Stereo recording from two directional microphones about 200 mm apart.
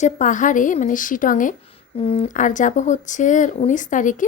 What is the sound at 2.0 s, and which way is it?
A woman's voice, 30° left (ahead or behind).